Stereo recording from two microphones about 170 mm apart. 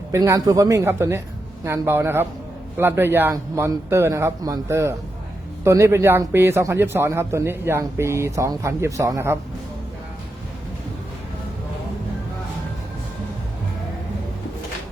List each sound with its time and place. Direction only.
0.1 s a man's voice: 20° right (ahead or behind)